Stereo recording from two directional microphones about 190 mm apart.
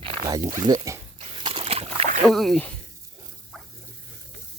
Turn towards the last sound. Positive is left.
turn(degrees=0)  # may be behind; listen again after turning